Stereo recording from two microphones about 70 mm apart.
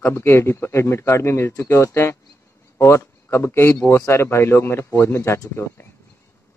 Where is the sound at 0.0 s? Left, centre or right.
Left.